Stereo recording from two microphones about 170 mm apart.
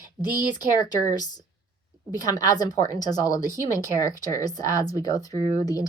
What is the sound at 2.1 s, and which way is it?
A woman's voice, 20° left (ahead or behind).